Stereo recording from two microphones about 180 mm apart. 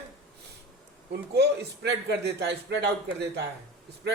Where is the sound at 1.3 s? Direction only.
65° right (ahead or behind).